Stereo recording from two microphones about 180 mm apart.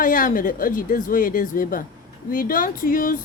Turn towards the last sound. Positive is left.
turn(degrees=50)  # may be behind; listen again after turning